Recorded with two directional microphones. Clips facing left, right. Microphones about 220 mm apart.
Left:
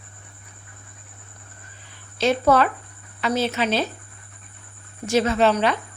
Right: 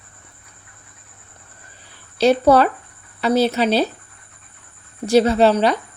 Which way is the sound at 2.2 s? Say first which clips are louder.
Right 5 dB; 35° right (ahead or behind).